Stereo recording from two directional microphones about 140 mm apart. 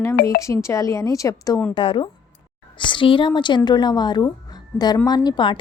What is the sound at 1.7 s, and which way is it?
A woman's voice, 35° left (ahead or behind).